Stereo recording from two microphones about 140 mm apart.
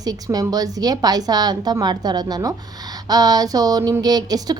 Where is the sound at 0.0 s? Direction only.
25° right (ahead or behind).